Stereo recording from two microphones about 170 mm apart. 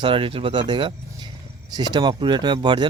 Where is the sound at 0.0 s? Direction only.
30° right (ahead or behind).